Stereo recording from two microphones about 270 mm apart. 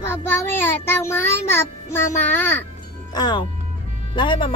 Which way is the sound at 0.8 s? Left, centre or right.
Centre.